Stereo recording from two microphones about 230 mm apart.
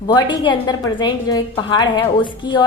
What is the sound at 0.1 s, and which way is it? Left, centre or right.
A woman's voice, centre.